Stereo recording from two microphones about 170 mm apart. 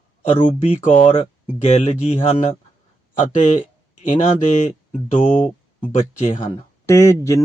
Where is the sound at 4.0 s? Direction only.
45° left (ahead or behind).